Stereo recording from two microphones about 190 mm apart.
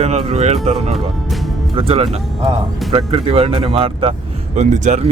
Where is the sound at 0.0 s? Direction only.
35° right (ahead or behind).